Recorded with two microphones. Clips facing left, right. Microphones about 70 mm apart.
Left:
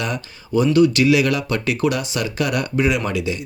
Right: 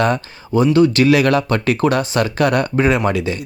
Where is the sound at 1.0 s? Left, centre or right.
Right.